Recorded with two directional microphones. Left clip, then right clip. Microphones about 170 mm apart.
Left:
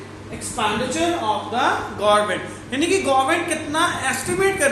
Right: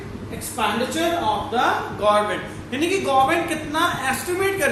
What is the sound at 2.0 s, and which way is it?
A man's voice, 25° left (ahead or behind).